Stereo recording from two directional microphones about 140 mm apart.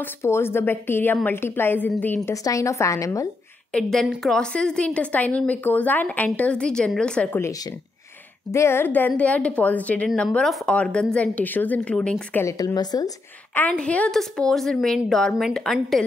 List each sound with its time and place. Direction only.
0.0 s a woman's voice: 15° left (ahead or behind)
2.3 s a woman's voice: 25° left (ahead or behind)
3.7 s a woman's voice: 5° left (ahead or behind)
8.5 s a woman's voice: 20° left (ahead or behind)
12.4 s a woman's voice: 25° left (ahead or behind)
13.6 s a woman's voice: 10° left (ahead or behind)